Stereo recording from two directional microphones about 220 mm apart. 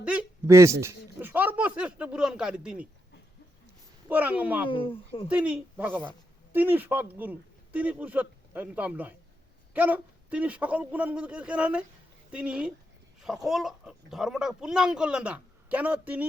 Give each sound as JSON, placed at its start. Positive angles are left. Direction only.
{"t": 0.0, "sound": "a sound", "side_deg": -5}
{"t": 4.1, "sound": "a woman's voice", "side_deg": -5}
{"t": 4.7, "sound": "speech", "side_deg": 25}
{"t": 5.3, "sound": "a woman's voice", "side_deg": -5}